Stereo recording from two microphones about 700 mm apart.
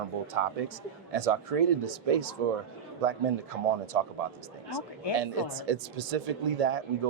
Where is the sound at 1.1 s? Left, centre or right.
Right.